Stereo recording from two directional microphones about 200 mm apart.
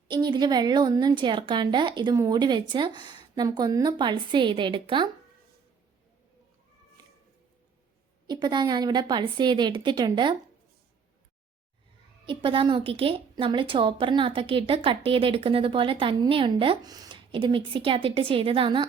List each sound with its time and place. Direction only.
0.1 s speech: 20° right (ahead or behind)
8.3 s speech: 20° right (ahead or behind)
12.2 s speech: 25° right (ahead or behind)